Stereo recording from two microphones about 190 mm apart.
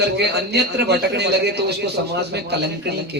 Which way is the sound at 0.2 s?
60° right (ahead or behind).